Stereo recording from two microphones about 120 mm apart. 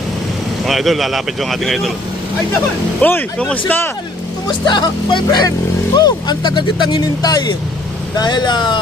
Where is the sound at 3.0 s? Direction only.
10° left (ahead or behind).